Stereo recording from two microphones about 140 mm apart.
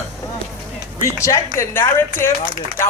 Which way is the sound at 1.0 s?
20° left (ahead or behind).